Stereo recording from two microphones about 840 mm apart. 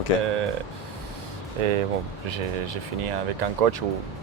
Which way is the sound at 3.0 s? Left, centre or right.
Right.